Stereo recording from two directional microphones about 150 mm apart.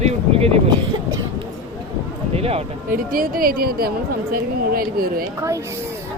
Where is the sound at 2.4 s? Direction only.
40° right (ahead or behind).